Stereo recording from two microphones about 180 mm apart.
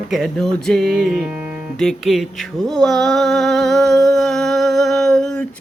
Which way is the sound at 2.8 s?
Centre (ahead or behind).